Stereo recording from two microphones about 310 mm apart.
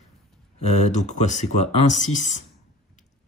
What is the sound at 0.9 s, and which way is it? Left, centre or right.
Speech, left.